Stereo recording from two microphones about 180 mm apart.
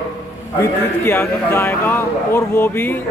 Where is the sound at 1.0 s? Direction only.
10° left (ahead or behind).